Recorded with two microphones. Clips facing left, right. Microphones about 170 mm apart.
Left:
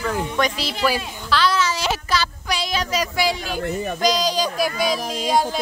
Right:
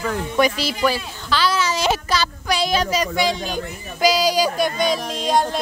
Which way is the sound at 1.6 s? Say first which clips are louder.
Right 3 dB; 20° right (ahead or behind).